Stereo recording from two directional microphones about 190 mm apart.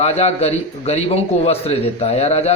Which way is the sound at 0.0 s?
35° left (ahead or behind).